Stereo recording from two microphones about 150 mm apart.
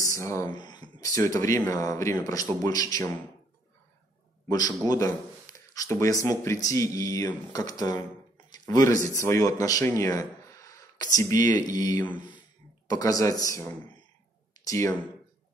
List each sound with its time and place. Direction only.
0.0 s speech: 20° left (ahead or behind)
4.5 s speech: 25° left (ahead or behind)
11.3 s speech: 60° right (ahead or behind)
11.6 s speech: 25° left (ahead or behind)